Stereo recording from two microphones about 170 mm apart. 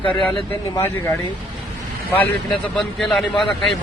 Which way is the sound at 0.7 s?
15° left (ahead or behind).